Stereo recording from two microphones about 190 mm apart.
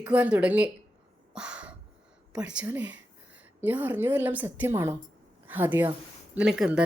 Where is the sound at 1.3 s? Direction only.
5° right (ahead or behind).